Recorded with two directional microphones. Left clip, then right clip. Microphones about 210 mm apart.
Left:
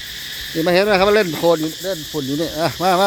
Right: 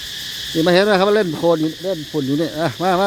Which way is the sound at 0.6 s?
10° right (ahead or behind).